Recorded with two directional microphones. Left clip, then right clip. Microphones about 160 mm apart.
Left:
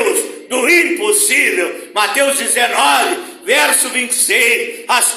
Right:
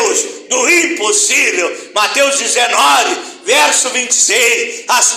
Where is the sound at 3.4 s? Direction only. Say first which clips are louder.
Right 2 dB; 20° left (ahead or behind).